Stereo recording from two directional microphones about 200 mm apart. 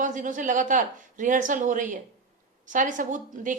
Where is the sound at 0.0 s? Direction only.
40° right (ahead or behind).